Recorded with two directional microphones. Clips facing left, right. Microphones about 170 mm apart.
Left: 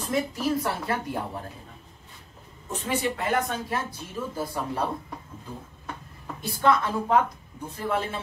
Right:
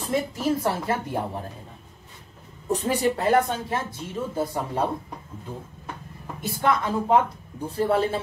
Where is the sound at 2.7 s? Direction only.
35° right (ahead or behind).